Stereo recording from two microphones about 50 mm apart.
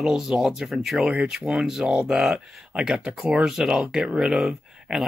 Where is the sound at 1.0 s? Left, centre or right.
Centre.